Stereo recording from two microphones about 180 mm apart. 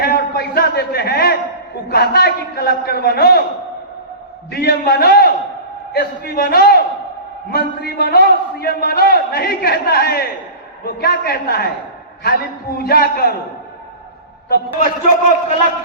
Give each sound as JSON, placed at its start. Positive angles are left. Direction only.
{"t": 0.0, "sound": "a man's voice", "side_deg": 60}
{"t": 4.5, "sound": "a man's voice", "side_deg": 60}
{"t": 14.5, "sound": "a man's voice", "side_deg": 50}